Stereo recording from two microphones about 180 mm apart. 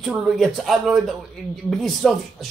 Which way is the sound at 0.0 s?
Centre (ahead or behind).